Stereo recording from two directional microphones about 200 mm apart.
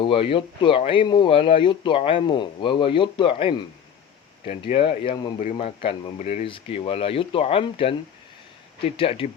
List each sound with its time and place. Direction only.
0.0 s speech: 25° left (ahead or behind)
9.0 s speech: 30° left (ahead or behind)